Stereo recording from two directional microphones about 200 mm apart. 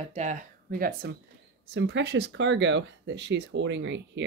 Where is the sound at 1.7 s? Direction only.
60° right (ahead or behind).